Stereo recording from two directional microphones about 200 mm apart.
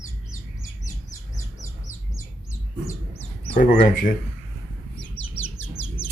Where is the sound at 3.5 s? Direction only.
40° left (ahead or behind).